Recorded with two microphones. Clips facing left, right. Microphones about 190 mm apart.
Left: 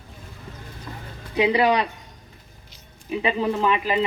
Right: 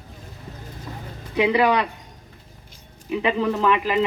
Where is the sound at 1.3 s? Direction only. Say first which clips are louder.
Even; 25° left (ahead or behind).